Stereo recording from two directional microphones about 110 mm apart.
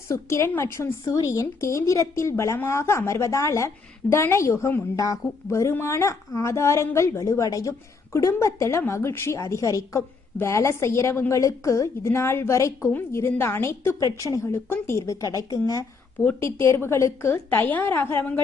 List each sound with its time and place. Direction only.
0.1 s a woman's voice: 25° left (ahead or behind)